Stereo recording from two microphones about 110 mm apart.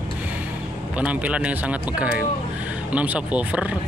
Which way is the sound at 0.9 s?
10° right (ahead or behind).